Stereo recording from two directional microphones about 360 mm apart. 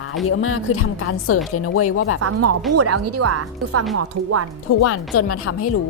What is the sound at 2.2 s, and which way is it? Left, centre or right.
Speech, right.